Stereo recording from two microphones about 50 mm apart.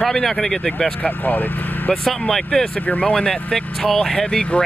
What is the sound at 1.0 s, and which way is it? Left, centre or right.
Speech, left.